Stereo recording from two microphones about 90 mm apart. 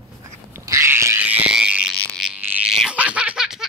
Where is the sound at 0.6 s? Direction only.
30° right (ahead or behind).